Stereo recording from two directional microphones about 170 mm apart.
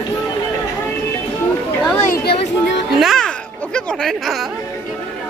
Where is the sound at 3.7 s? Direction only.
5° left (ahead or behind).